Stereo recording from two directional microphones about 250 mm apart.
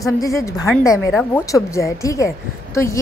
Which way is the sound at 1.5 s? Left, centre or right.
Centre.